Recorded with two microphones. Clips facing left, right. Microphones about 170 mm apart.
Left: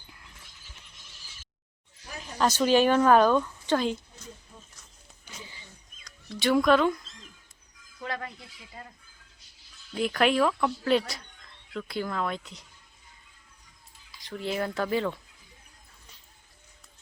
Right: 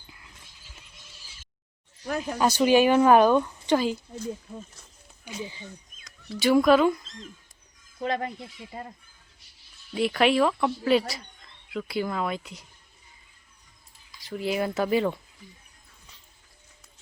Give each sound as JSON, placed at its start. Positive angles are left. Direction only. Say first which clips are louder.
{"t": 2.0, "sound": "speech", "louder": "right 13 dB", "side_deg": -65}
{"t": 2.4, "sound": "speech", "louder": "right 2 dB", "side_deg": -10}
{"t": 5.2, "sound": "speech", "louder": "right 11 dB", "side_deg": -15}
{"t": 6.1, "sound": "speech", "louder": "right 3 dB", "side_deg": -5}
{"t": 8.0, "sound": "speech", "louder": "right 7 dB", "side_deg": -25}
{"t": 9.9, "sound": "speech", "louder": "right 2 dB", "side_deg": -5}
{"t": 14.1, "sound": "speech", "louder": "right 3 dB", "side_deg": -5}